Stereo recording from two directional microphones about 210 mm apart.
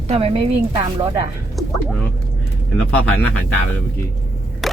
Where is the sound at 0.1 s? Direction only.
25° right (ahead or behind).